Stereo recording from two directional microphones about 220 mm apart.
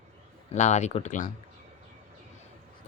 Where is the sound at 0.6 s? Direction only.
30° left (ahead or behind).